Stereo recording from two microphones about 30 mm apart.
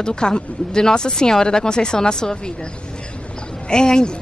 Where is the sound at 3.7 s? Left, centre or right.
Left.